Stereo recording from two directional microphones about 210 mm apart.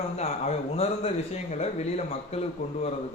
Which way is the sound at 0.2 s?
30° left (ahead or behind).